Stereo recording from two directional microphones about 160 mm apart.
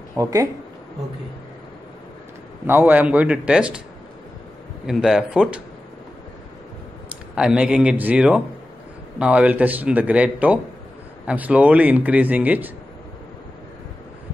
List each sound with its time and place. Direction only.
0.1 s speech: 20° right (ahead or behind)
2.6 s a man's voice: 10° right (ahead or behind)
4.8 s speech: 5° right (ahead or behind)
7.3 s a man's voice: 5° right (ahead or behind)